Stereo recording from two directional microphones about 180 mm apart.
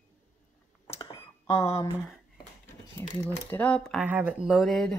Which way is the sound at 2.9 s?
15° left (ahead or behind).